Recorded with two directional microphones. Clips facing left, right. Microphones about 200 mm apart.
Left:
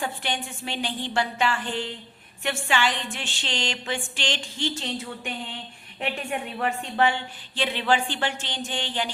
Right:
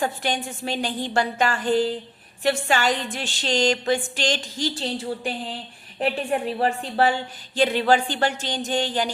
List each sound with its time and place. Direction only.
0.0 s a woman's voice: 40° right (ahead or behind)